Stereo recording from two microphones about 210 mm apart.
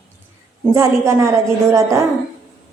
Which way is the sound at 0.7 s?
15° right (ahead or behind).